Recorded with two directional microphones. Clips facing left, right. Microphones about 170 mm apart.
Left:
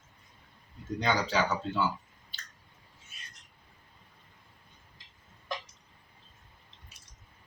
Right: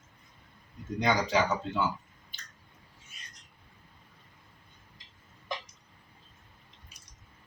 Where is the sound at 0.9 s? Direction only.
15° right (ahead or behind).